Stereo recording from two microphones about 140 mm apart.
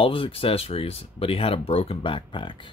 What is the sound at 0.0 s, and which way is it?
Speech, 40° left (ahead or behind).